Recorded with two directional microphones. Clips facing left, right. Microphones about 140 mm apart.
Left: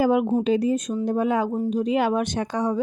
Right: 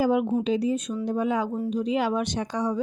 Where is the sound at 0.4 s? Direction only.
50° left (ahead or behind).